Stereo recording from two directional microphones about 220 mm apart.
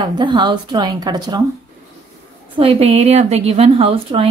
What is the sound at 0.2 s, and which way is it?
A woman's voice, 20° right (ahead or behind).